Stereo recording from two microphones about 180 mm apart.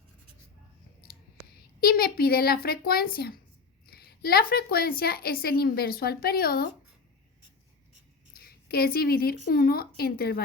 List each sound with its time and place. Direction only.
1.8 s a woman's voice: 55° left (ahead or behind)
8.4 s a woman's voice: 60° left (ahead or behind)